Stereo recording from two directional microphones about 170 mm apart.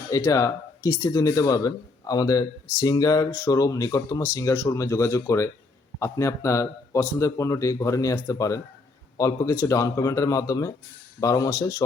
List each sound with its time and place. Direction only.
0.1 s speech: 20° left (ahead or behind)